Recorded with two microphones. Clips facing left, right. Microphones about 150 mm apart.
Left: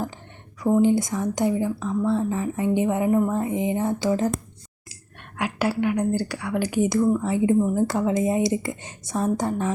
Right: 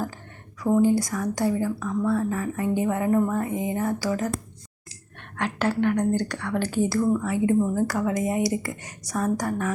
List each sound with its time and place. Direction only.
0.6 s speech: 20° left (ahead or behind)
5.4 s speech: 10° left (ahead or behind); by 9.7 s 25° left (ahead or behind)